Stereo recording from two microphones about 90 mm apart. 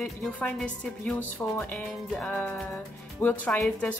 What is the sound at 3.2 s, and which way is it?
Speech, 20° left (ahead or behind).